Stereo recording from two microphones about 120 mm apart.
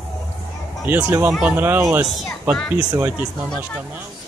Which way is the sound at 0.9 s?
15° right (ahead or behind).